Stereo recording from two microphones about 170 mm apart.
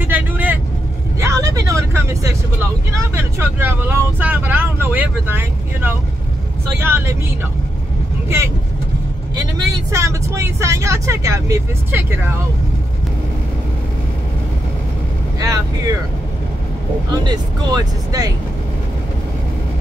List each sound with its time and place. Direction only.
0.0 s vehicle: 10° right (ahead or behind)
3.0 s speech: 15° right (ahead or behind)
9.3 s speech: 20° right (ahead or behind)
15.3 s speech: 20° right (ahead or behind)
17.2 s speech: 25° right (ahead or behind)